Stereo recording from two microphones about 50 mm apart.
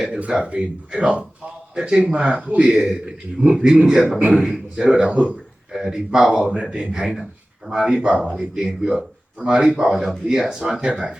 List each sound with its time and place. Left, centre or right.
0.3 s speech: centre
4.3 s speech: centre
5.0 s speech: right
5.7 s speech: centre